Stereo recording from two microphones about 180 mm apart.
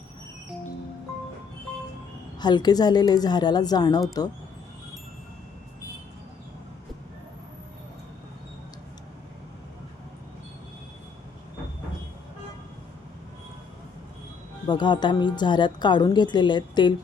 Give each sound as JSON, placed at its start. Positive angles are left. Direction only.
{"t": 2.4, "sound": "a woman's voice", "side_deg": 25}
{"t": 14.7, "sound": "a woman's voice", "side_deg": 25}